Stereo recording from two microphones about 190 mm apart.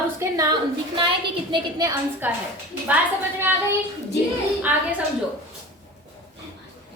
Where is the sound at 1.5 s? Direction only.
20° right (ahead or behind).